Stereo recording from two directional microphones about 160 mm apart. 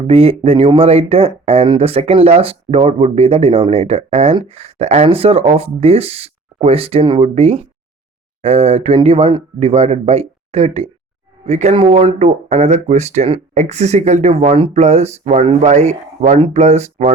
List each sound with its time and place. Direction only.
0.1 s speech: 40° right (ahead or behind)